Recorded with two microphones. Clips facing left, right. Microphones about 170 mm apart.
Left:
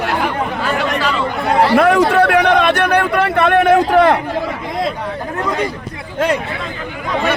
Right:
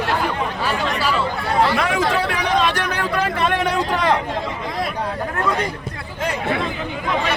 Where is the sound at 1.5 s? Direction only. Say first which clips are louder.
Left 8 dB; 60° left (ahead or behind).